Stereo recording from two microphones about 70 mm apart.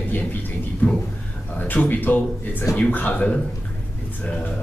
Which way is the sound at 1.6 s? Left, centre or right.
Left.